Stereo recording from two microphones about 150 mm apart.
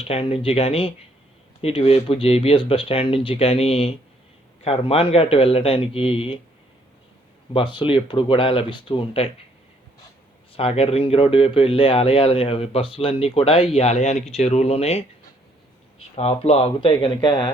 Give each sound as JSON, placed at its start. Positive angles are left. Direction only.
{"t": 0.0, "sound": "speech", "side_deg": 40}
{"t": 7.5, "sound": "speech", "side_deg": 35}
{"t": 10.5, "sound": "speech", "side_deg": 40}
{"t": 16.1, "sound": "speech", "side_deg": 45}